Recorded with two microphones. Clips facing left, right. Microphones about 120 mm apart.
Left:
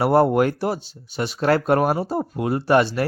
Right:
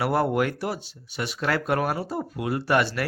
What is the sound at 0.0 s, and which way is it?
Speech, 30° left (ahead or behind).